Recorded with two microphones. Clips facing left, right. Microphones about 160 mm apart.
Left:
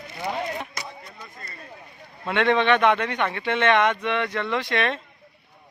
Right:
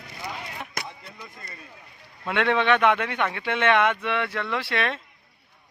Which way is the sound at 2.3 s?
5° right (ahead or behind).